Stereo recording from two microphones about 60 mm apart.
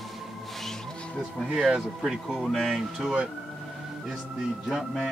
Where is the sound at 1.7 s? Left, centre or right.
Centre.